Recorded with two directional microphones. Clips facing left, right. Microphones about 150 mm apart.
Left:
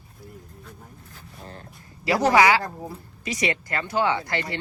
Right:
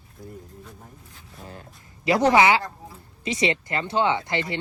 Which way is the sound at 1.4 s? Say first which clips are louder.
Right 1 dB; 5° right (ahead or behind).